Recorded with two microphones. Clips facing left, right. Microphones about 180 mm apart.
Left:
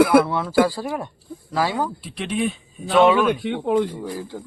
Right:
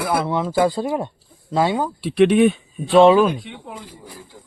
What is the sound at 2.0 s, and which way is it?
Speech, 65° right (ahead or behind).